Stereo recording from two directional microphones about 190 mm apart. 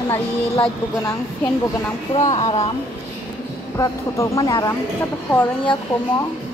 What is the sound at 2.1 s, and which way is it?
Speech, 30° left (ahead or behind).